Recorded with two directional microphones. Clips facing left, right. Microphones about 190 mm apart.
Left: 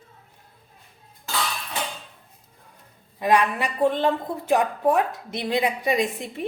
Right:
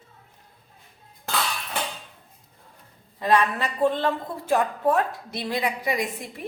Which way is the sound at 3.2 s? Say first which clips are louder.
Left 1 dB; 15° left (ahead or behind).